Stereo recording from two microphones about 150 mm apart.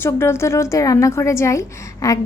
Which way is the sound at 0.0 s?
15° left (ahead or behind).